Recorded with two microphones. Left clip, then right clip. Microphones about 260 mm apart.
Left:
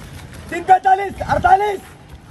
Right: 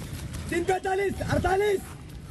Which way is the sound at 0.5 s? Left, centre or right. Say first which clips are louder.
Left 14 dB; centre.